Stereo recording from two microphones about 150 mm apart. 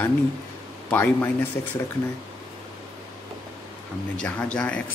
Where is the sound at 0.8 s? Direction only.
15° left (ahead or behind).